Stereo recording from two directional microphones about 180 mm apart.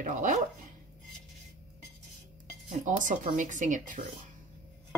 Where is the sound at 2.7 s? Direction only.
45° right (ahead or behind).